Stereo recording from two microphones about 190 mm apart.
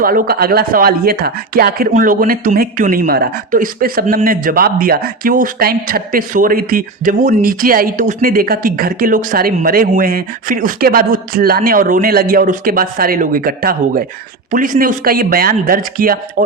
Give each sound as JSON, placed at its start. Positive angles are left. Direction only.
{"t": 0.0, "sound": "speech", "side_deg": -50}